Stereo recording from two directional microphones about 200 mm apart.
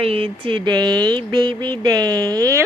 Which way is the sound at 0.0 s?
30° right (ahead or behind).